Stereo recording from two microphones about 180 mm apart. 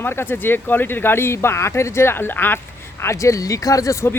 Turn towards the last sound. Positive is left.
turn(degrees=20)  # may be behind; listen again after turning